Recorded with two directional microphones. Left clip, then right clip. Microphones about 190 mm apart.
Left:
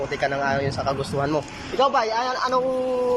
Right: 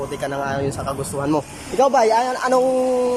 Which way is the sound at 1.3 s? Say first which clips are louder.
Right 3 dB; 30° right (ahead or behind).